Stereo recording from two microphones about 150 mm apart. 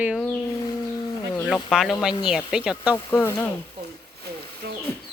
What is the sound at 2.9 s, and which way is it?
Speech, 15° left (ahead or behind).